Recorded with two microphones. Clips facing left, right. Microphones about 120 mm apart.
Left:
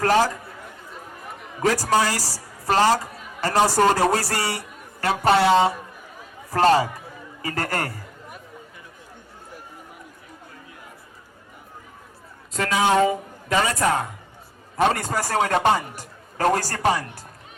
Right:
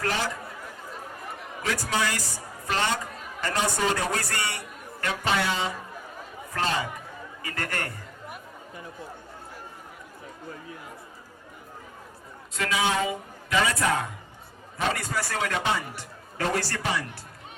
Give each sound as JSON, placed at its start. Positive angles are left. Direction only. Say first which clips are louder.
{"t": 0.0, "sound": "speech", "louder": "left 10 dB", "side_deg": 45}
{"t": 1.6, "sound": "a man's voice", "louder": "left 8 dB", "side_deg": 40}
{"t": 3.6, "sound": "a man's voice", "louder": "left 9 dB", "side_deg": 50}
{"t": 4.1, "sound": "a man's voice", "louder": "left 6 dB", "side_deg": 35}
{"t": 12.5, "sound": "a man's voice", "louder": "left 7 dB", "side_deg": 45}